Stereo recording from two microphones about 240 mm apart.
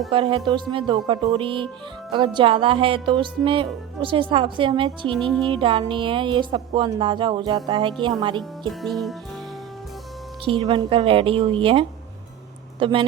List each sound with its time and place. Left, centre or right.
0.1 s music: right
5.1 s music: centre
5.5 s music: right
8.4 s music: centre
10.4 s music: right